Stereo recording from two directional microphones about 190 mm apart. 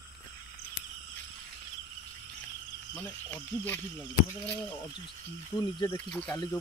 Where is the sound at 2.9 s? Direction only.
10° left (ahead or behind).